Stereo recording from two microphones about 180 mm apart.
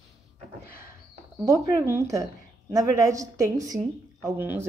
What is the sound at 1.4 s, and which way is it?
A woman's voice, 15° right (ahead or behind).